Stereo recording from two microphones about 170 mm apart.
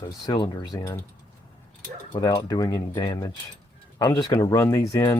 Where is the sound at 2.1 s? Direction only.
25° left (ahead or behind).